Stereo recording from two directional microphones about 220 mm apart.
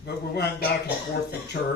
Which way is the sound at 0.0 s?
50° left (ahead or behind).